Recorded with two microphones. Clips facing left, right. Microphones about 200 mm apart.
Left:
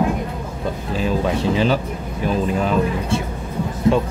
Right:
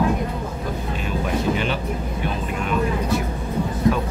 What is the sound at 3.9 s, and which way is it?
Speech, 25° left (ahead or behind).